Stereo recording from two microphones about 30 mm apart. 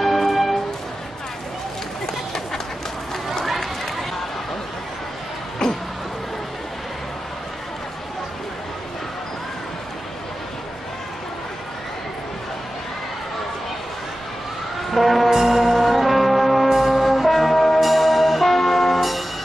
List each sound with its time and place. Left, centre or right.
0.0 s music: centre
2.0 s run: centre
5.6 s a sound: left
14.9 s music: centre
15.2 s bell: centre